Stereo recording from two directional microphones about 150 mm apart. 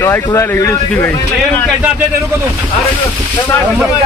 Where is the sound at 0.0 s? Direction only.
20° left (ahead or behind).